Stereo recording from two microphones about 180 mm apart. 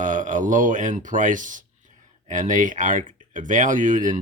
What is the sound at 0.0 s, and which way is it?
Speech, 45° right (ahead or behind).